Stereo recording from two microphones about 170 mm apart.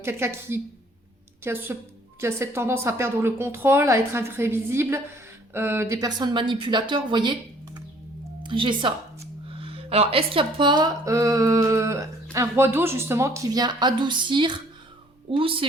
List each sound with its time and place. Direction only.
0.0 s a woman's voice: 15° right (ahead or behind); by 15.6 s 30° right (ahead or behind)